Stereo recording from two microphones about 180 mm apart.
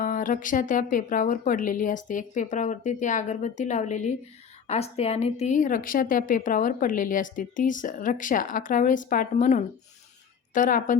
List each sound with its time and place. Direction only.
0.0 s a woman's voice: 45° left (ahead or behind)